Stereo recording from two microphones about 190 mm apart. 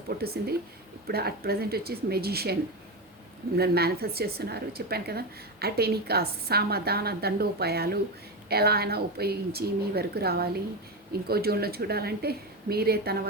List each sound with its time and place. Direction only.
0.2 s a woman's voice: 55° right (ahead or behind)